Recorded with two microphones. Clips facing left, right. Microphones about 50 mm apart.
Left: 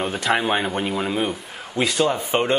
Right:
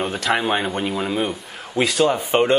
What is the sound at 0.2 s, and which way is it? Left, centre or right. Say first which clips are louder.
Speech: even; centre.